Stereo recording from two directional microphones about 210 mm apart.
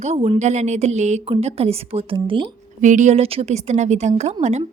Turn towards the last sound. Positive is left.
turn(degrees=-35)  # may be behind; listen again after turning